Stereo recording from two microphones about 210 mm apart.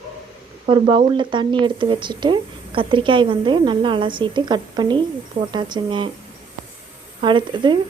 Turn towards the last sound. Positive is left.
turn(degrees=-20)  # may be behind; listen again after turning